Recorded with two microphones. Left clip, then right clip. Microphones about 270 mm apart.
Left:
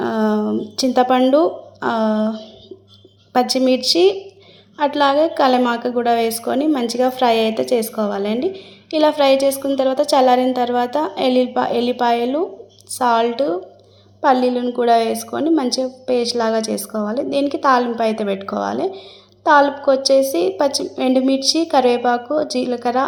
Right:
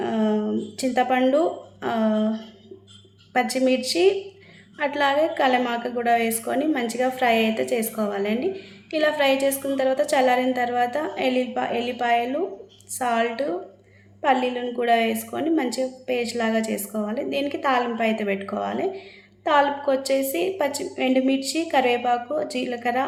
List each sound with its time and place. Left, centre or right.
0.0 s a sound: left
2.1 s speech: centre
3.3 s a woman's voice: centre